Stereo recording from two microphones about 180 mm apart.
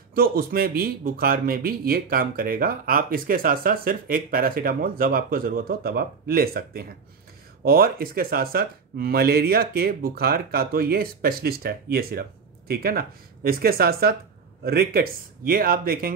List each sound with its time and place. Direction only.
0.1 s speech: 55° right (ahead or behind)